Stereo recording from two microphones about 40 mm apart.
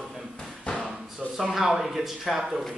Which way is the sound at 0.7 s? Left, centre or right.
Centre.